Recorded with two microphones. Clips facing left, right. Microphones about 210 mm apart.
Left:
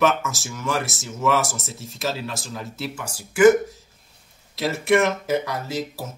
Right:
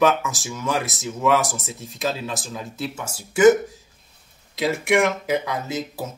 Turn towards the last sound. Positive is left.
turn(degrees=-20)  # may be behind; listen again after turning